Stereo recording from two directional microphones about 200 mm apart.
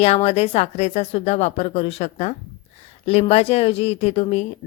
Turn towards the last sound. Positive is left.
turn(degrees=30)  # may be behind; listen again after turning